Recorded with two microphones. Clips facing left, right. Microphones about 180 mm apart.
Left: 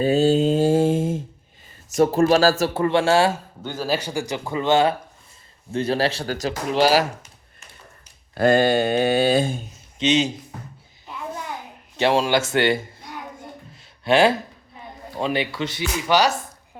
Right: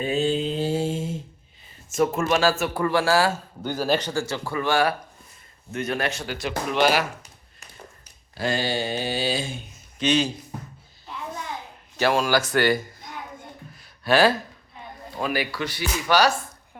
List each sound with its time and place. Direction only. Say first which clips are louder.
0.0 s mantra: left 6 dB; 35° left (ahead or behind)
2.0 s speech: left 5 dB; 35° left (ahead or behind)
3.6 s speech: right 2 dB; centre (ahead or behind); by 7.0 s 35° left (ahead or behind)
8.4 s a sound: left 9 dB; 55° left (ahead or behind)
10.0 s speech: left 2 dB; 20° left (ahead or behind)
11.9 s speech: left 2 dB; 25° left (ahead or behind)